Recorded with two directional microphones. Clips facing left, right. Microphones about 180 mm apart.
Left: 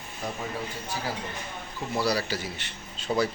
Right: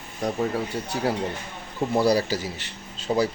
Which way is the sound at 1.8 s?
55° right (ahead or behind).